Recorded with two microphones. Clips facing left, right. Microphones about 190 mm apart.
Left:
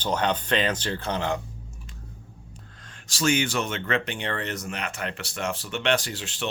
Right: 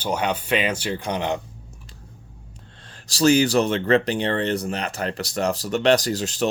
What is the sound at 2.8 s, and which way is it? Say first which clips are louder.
Speech: right 7 dB; 35° right (ahead or behind).